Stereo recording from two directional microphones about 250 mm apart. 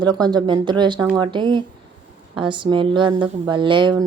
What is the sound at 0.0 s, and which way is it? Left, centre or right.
Speech, centre.